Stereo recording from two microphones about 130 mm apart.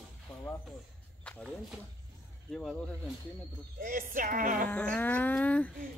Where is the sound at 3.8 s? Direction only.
90° right.